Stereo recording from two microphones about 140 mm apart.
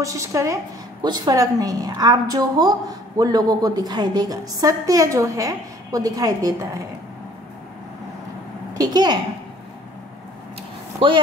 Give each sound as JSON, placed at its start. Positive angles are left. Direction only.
{"t": 0.0, "sound": "a woman's voice", "side_deg": -20}
{"t": 8.7, "sound": "a woman's voice", "side_deg": -30}